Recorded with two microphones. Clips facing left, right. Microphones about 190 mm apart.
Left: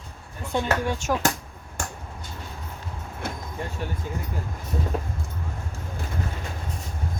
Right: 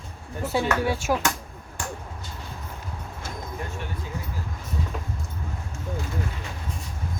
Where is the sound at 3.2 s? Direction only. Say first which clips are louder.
Left 5 dB; 60° left (ahead or behind).